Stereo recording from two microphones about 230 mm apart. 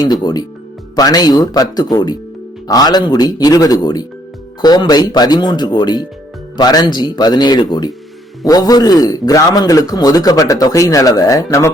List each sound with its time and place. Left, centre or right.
0.0 s a man's voice: centre